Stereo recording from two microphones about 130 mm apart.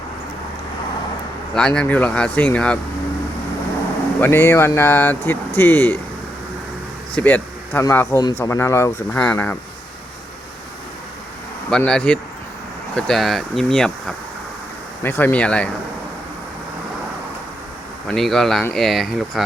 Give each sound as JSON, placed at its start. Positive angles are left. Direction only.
{"t": 1.5, "sound": "speech", "side_deg": 5}
{"t": 4.2, "sound": "speech", "side_deg": 20}
{"t": 7.2, "sound": "speech", "side_deg": 10}
{"t": 11.9, "sound": "speech", "side_deg": 5}
{"t": 15.0, "sound": "speech", "side_deg": 15}
{"t": 18.1, "sound": "speech", "side_deg": 5}